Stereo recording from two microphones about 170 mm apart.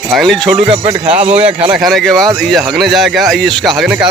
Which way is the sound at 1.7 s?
Centre (ahead or behind).